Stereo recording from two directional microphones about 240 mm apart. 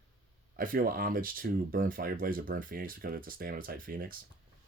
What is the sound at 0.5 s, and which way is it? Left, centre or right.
Speech, right.